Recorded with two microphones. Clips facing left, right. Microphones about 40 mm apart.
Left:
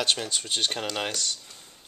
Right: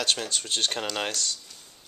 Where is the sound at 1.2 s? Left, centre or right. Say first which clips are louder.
Even; left.